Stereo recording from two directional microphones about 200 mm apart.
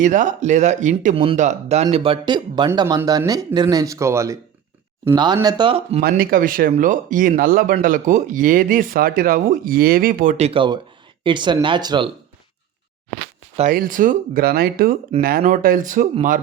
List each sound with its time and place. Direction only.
0.0 s speech: 40° right (ahead or behind)
6.0 s speech: 50° right (ahead or behind); by 12.1 s 25° right (ahead or behind)
13.6 s speech: 40° right (ahead or behind)